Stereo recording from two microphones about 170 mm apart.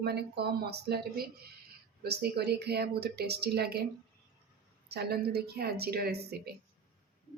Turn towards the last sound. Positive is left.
turn(degrees=-70)  # may be behind; listen again after turning